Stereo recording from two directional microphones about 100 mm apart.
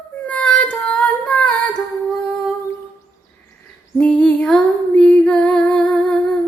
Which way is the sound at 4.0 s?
10° left (ahead or behind).